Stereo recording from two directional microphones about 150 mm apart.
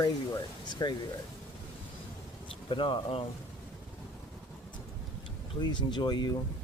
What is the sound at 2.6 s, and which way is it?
Speech, 35° left (ahead or behind).